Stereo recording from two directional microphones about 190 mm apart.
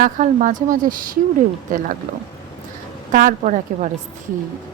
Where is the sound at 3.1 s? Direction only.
45° right (ahead or behind).